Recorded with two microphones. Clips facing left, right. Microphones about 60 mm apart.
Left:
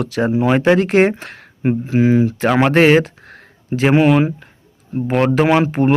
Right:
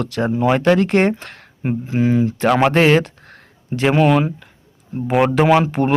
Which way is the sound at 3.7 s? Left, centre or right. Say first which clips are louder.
Left 2 dB; left.